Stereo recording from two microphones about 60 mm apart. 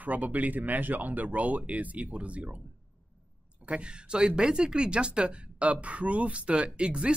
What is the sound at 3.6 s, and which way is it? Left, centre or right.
Speech, centre.